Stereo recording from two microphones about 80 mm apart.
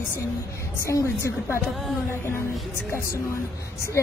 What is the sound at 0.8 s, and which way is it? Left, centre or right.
Speech, left.